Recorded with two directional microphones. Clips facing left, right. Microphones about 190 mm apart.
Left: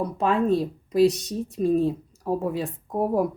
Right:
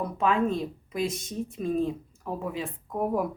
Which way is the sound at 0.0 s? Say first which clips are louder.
Left 2 dB; 35° left (ahead or behind).